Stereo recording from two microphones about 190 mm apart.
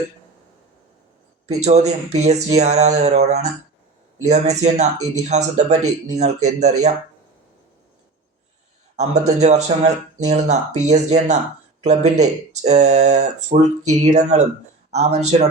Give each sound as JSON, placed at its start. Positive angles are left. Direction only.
{"t": 1.5, "sound": "speech", "side_deg": -35}
{"t": 9.0, "sound": "speech", "side_deg": -35}